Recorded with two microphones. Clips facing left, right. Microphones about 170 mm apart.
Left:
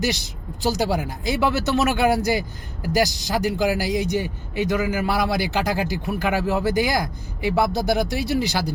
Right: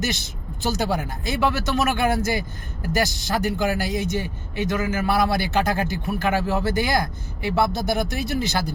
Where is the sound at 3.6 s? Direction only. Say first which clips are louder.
Left 2 dB; 15° left (ahead or behind).